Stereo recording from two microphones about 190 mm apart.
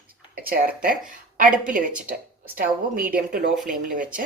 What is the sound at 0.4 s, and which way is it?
A woman's voice, 50° right (ahead or behind).